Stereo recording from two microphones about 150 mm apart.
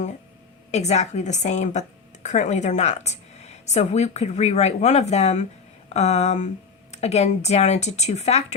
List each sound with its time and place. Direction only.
0.7 s a woman's voice: 50° left (ahead or behind)